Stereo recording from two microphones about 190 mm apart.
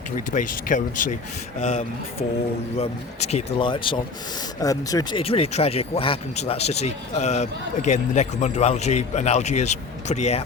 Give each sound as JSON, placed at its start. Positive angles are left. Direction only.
{"t": 0.3, "sound": "speech", "side_deg": 45}
{"t": 1.5, "sound": "speech", "side_deg": 35}
{"t": 5.2, "sound": "speech", "side_deg": 30}